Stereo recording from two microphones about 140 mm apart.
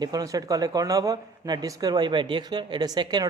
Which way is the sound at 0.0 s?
25° right (ahead or behind).